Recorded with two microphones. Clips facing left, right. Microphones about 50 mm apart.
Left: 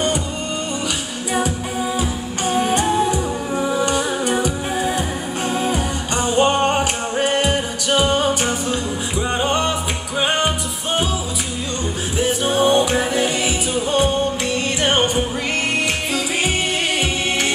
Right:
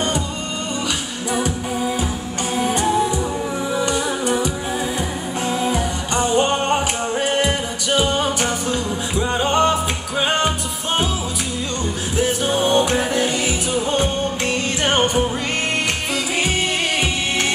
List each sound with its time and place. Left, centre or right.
2.5 s music: left